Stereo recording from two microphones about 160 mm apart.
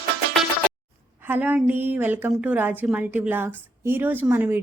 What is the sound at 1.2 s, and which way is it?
Speech, 10° right (ahead or behind).